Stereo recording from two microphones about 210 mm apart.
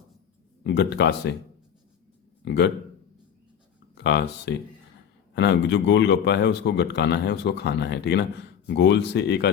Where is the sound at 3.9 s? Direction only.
55° left (ahead or behind).